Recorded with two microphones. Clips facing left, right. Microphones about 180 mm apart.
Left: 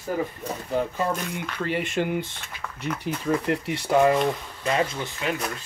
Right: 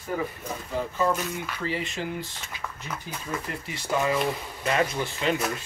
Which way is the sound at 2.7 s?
70° left (ahead or behind).